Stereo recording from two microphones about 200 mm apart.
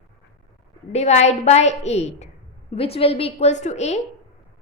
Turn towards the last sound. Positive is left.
turn(degrees=35)  # may be behind; listen again after turning